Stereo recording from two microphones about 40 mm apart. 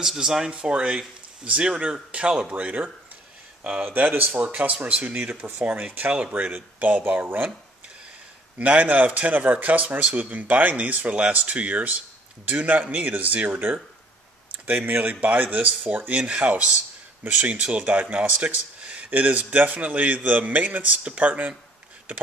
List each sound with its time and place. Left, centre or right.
0.0 s speech: centre
0.5 s speech: right
2.5 s a man's voice: right
5.4 s speech: right
7.1 s speech: right
8.5 s a man's voice: right
14.9 s speech: right
16.1 s a man's voice: right